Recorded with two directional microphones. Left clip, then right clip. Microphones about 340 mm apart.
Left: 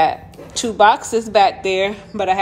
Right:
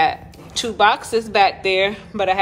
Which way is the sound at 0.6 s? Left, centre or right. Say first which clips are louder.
Left 3 dB; centre.